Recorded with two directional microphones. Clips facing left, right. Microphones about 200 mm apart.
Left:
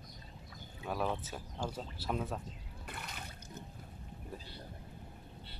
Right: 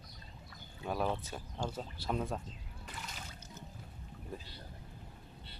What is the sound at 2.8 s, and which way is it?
Water, 60° left (ahead or behind).